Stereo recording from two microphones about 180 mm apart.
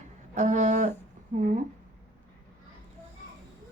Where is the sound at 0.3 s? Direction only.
40° right (ahead or behind).